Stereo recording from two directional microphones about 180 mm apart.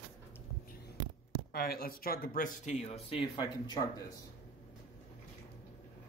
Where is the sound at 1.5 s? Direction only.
60° left (ahead or behind); by 3.0 s 35° left (ahead or behind).